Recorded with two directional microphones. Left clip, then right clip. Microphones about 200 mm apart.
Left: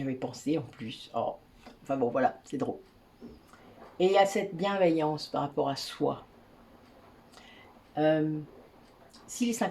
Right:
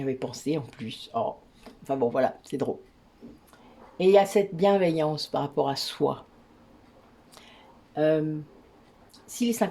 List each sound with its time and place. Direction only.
0.0 s speech: 45° right (ahead or behind)
3.9 s speech: 45° right (ahead or behind)
7.9 s speech: 45° right (ahead or behind)
9.2 s a woman's voice: 45° right (ahead or behind)